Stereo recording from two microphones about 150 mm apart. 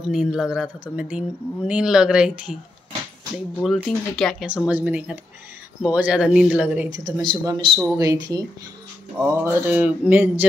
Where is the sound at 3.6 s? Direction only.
Centre (ahead or behind).